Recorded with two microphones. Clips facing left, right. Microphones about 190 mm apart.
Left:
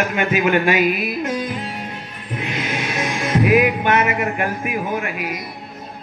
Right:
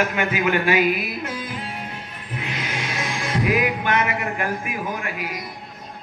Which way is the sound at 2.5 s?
25° left (ahead or behind).